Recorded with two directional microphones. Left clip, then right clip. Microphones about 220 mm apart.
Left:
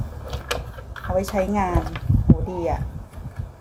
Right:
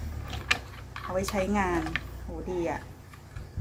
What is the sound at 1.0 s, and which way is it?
Speech, centre (ahead or behind).